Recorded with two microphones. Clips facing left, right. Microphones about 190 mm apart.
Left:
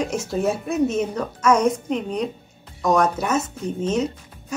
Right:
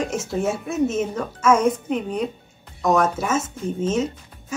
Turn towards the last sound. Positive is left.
turn(degrees=0)  # may be behind; listen again after turning